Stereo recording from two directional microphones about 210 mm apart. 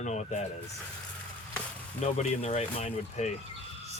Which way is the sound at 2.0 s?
30° left (ahead or behind).